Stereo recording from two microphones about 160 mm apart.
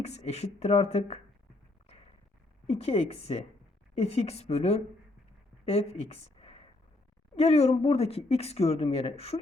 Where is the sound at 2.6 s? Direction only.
40° left (ahead or behind).